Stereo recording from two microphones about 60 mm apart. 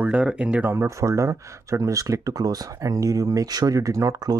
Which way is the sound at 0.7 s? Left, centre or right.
Right.